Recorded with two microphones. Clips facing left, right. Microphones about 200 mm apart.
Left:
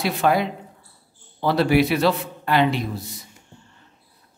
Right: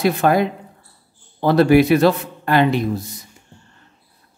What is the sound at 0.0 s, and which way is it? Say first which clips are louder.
Speech: right 4 dB; 50° right (ahead or behind).